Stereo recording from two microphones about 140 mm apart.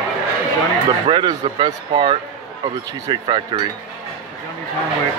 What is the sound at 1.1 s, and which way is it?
Speech, 35° right (ahead or behind).